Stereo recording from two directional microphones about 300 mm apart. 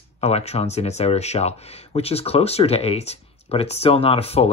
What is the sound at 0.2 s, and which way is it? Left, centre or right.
Speech, left.